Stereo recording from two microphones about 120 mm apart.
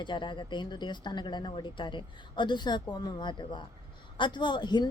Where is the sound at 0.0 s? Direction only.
40° left (ahead or behind).